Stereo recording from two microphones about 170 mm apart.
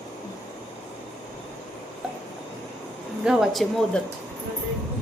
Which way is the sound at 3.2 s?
5° right (ahead or behind).